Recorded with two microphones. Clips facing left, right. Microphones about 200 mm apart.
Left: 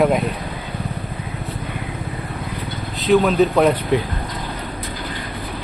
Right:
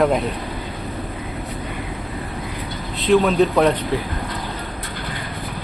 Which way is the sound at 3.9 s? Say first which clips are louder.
Left 4 dB; 20° left (ahead or behind).